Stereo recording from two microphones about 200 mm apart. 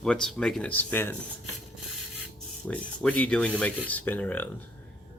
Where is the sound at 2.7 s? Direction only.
5° left (ahead or behind).